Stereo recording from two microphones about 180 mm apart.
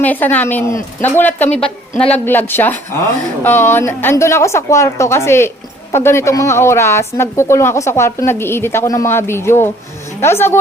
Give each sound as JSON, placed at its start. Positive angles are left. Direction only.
{"t": 0.0, "sound": "speech", "side_deg": 10}